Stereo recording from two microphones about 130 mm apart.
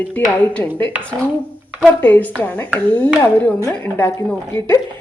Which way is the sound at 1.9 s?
15° left (ahead or behind).